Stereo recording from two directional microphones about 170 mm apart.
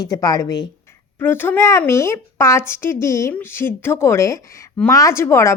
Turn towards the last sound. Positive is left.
turn(degrees=15)  # may be behind; listen again after turning